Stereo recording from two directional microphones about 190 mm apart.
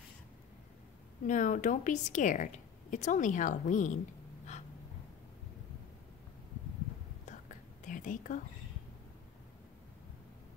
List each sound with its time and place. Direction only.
1.2 s a woman's voice: 40° left (ahead or behind)
7.8 s whispering: 45° left (ahead or behind)